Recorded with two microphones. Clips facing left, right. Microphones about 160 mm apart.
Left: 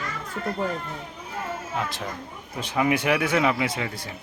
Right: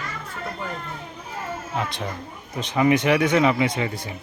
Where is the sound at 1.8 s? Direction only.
5° left (ahead or behind).